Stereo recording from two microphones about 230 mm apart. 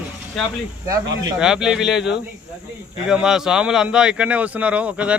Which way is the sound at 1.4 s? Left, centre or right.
Centre.